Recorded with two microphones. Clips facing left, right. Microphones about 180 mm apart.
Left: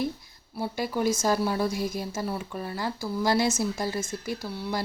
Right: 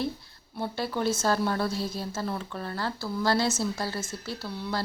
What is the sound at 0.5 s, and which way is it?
A woman's voice, 10° left (ahead or behind).